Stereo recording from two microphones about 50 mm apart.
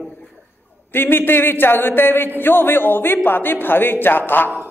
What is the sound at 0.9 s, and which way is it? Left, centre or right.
A man's voice, left.